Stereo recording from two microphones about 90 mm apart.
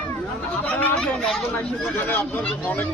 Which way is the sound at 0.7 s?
10° left (ahead or behind).